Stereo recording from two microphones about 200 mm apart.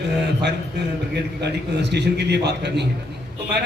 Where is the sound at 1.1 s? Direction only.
55° right (ahead or behind).